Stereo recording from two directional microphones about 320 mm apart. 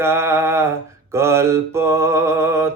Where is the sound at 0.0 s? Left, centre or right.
Centre.